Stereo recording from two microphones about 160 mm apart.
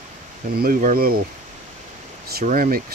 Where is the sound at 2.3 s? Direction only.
60° right (ahead or behind).